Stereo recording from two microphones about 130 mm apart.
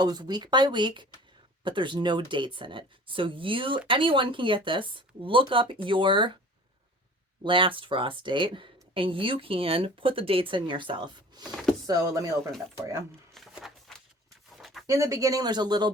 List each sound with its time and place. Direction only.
0.0 s speech: 30° right (ahead or behind)
7.4 s speech: 40° right (ahead or behind)
13.3 s a sound: centre (ahead or behind)
14.8 s speech: 25° right (ahead or behind)